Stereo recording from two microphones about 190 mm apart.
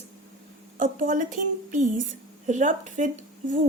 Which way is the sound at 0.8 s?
45° right (ahead or behind).